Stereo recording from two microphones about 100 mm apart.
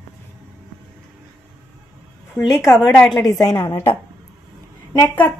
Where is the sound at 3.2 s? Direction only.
40° left (ahead or behind).